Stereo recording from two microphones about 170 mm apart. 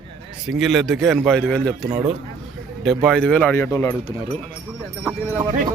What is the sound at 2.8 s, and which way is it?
Speech, 5° left (ahead or behind).